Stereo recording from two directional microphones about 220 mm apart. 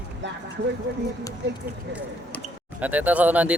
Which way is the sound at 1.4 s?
55° right (ahead or behind).